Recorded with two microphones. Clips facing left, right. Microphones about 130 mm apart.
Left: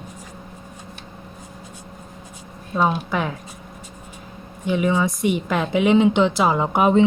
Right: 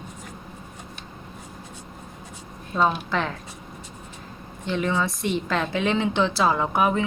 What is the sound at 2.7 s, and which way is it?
Speech, 10° left (ahead or behind).